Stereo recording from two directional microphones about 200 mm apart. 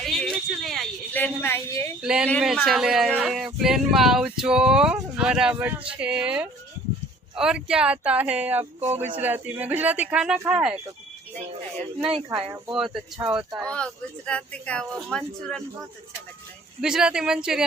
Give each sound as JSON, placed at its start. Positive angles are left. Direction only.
{"t": 0.0, "sound": "a sound", "side_deg": 0}
{"t": 2.0, "sound": "speech", "side_deg": -5}
{"t": 12.4, "sound": "speech", "side_deg": -20}
{"t": 12.7, "sound": "speech", "side_deg": -5}
{"t": 16.8, "sound": "speech", "side_deg": -5}